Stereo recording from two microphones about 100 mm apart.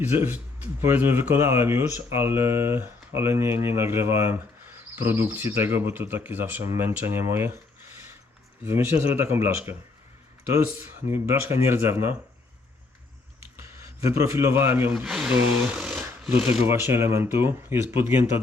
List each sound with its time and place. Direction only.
0.0 s speech: 20° right (ahead or behind)
8.6 s speech: 25° right (ahead or behind)
11.1 s speech: 25° right (ahead or behind)
14.1 s speech: 30° right (ahead or behind)
15.0 s speech: 5° right (ahead or behind); by 18.3 s 25° right (ahead or behind)